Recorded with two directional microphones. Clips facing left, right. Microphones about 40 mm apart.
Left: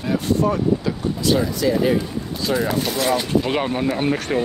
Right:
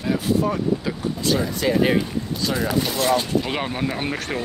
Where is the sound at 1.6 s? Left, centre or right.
Right.